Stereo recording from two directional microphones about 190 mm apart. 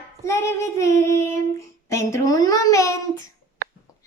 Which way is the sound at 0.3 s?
15° left (ahead or behind).